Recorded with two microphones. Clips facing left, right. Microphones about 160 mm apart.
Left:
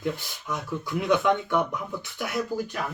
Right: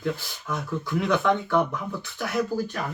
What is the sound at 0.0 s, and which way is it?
Speech, 20° left (ahead or behind).